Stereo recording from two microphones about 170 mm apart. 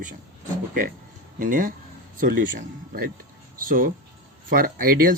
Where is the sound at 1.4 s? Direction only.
55° right (ahead or behind).